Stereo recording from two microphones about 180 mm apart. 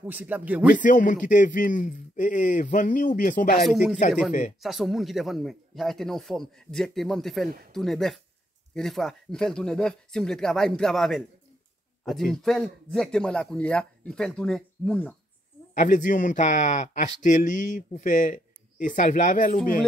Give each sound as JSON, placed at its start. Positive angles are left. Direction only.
{"t": 0.0, "sound": "speech", "side_deg": -10}
{"t": 0.7, "sound": "a man's voice", "side_deg": 45}
{"t": 3.5, "sound": "speech", "side_deg": 0}
{"t": 4.3, "sound": "a man's voice", "side_deg": 45}
{"t": 4.6, "sound": "speech", "side_deg": 0}
{"t": 15.7, "sound": "a man's voice", "side_deg": 45}